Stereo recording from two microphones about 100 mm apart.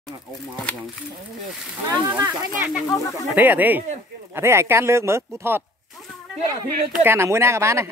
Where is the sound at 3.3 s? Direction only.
15° right (ahead or behind).